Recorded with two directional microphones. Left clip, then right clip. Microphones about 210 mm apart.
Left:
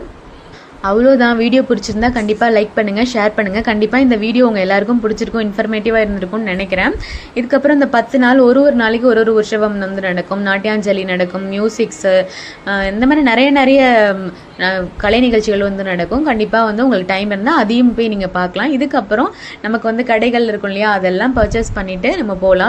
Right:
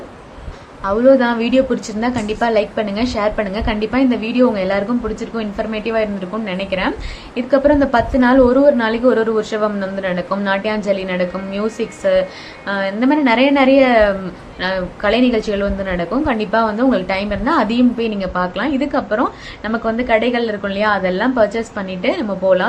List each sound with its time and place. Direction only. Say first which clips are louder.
0.8 s a woman's voice: left 2 dB; 20° left (ahead or behind)